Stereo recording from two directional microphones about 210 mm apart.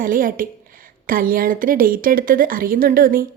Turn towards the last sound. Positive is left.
turn(degrees=-45)  # may be behind; listen again after turning